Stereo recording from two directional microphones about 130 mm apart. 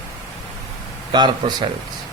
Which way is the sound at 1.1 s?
35° right (ahead or behind).